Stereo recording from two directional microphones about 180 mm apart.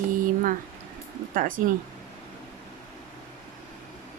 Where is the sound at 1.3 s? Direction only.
50° right (ahead or behind).